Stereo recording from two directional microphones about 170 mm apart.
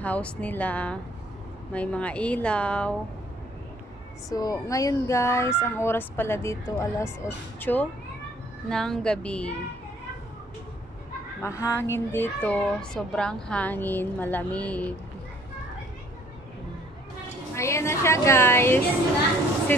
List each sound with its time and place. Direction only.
0.0 s a child's voice: 10° left (ahead or behind)
4.3 s a child's voice: 20° left (ahead or behind)
11.4 s a child's voice: 15° left (ahead or behind)
17.6 s a child's voice: 15° left (ahead or behind)